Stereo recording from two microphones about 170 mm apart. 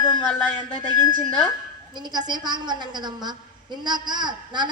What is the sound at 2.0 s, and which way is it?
A man's voice, 25° right (ahead or behind).